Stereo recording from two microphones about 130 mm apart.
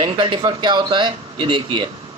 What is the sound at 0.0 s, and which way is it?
Speech, 40° right (ahead or behind).